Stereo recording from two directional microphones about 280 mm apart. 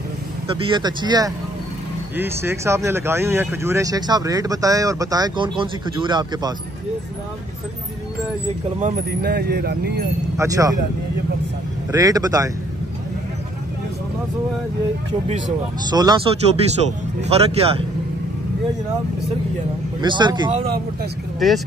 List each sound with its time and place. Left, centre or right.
0.7 s speech: centre
8.7 s speech: right
10.3 s speech: centre
11.9 s speech: centre
15.9 s speech: centre
20.0 s speech: centre
21.4 s speech: centre